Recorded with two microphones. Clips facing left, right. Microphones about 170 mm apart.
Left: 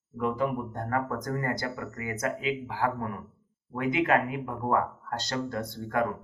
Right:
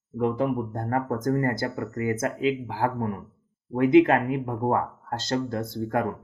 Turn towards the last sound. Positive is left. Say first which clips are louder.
# right 4 dB
turn(degrees=-30)  # may be behind; listen again after turning